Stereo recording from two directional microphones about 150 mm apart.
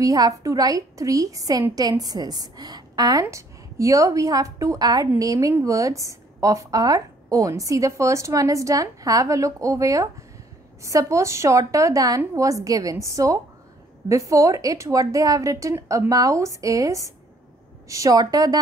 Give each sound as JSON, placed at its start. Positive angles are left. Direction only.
{"t": 0.0, "sound": "a woman's voice", "side_deg": -25}